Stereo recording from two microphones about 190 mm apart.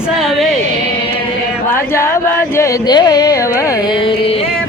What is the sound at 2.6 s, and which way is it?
Carnatic music, 20° left (ahead or behind).